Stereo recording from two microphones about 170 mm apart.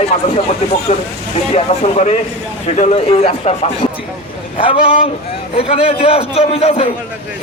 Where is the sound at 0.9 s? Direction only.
40° left (ahead or behind).